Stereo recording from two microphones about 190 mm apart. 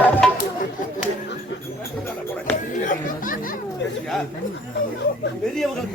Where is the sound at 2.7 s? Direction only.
40° left (ahead or behind).